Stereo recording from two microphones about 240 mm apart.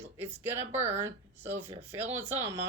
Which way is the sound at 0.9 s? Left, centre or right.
Centre.